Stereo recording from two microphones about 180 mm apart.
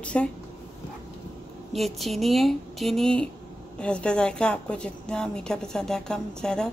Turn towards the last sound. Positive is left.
turn(degrees=5)  # may be behind; listen again after turning